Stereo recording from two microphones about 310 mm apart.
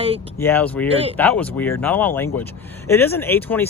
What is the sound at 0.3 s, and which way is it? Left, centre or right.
Speech, centre.